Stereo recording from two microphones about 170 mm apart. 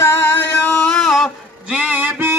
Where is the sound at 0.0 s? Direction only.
10° left (ahead or behind).